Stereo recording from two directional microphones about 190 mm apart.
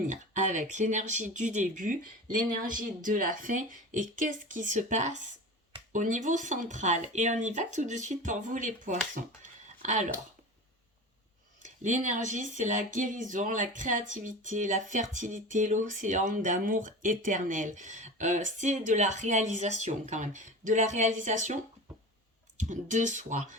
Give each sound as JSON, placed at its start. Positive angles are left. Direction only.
{"t": 0.1, "sound": "speech", "side_deg": -40}
{"t": 11.6, "sound": "speech", "side_deg": -40}